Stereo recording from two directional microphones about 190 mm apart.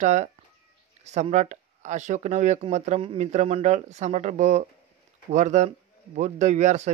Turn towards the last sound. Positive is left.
turn(degrees=-40)  # may be behind; listen again after turning